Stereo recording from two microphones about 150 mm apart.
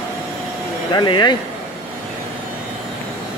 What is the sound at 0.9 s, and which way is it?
Speech, 30° left (ahead or behind).